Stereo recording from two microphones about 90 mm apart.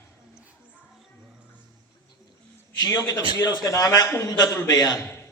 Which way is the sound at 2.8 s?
40° left (ahead or behind).